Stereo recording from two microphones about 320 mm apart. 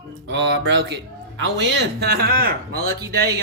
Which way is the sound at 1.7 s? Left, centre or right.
Right.